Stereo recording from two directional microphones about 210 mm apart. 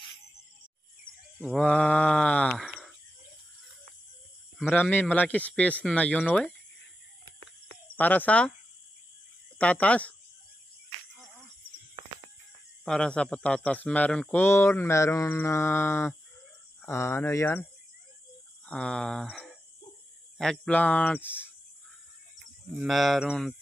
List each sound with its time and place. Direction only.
1.4 s speech: 5° left (ahead or behind)
4.6 s speech: 5° left (ahead or behind)
7.9 s speech: 10° left (ahead or behind)
9.6 s speech: 5° left (ahead or behind)
11.9 s a sound: 25° right (ahead or behind)
12.8 s speech: 5° left (ahead or behind)
18.7 s speech: 5° left (ahead or behind)
22.8 s speech: centre (ahead or behind)